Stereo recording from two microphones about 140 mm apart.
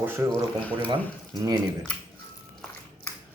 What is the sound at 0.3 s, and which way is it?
Speech, 10° left (ahead or behind).